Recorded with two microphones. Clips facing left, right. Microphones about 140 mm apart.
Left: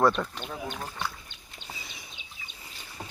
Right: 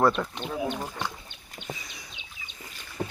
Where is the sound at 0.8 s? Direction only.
15° right (ahead or behind).